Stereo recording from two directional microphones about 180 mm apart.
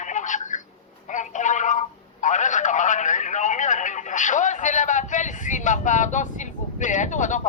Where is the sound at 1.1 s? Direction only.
45° left (ahead or behind).